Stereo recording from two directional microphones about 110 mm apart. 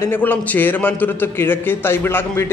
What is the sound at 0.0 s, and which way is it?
A man's voice, 20° left (ahead or behind).